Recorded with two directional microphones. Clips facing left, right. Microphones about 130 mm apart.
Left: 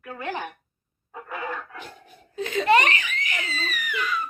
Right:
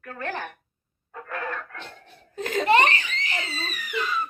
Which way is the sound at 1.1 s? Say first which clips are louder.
Even; 10° left (ahead or behind).